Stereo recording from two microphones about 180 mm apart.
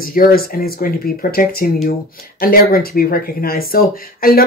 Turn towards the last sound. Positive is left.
turn(degrees=55)  # may be behind; listen again after turning